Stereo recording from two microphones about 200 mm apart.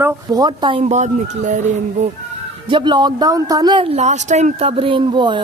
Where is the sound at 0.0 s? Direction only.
20° right (ahead or behind); by 2.0 s 35° right (ahead or behind).